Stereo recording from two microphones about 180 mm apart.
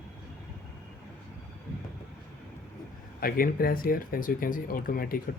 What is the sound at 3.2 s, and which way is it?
Speech, 55° left (ahead or behind).